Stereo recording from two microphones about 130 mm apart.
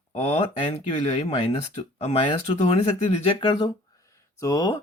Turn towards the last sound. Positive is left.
turn(degrees=30)  # may be behind; listen again after turning